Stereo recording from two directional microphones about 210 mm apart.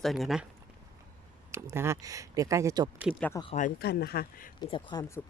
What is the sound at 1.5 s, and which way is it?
Speech, 10° right (ahead or behind).